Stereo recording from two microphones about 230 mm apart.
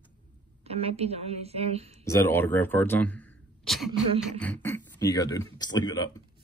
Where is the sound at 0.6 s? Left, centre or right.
Right.